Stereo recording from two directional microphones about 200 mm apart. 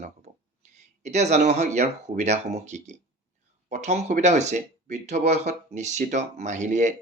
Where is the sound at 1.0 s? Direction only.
35° right (ahead or behind).